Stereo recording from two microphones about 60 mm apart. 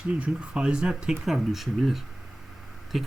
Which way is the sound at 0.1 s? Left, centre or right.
Centre.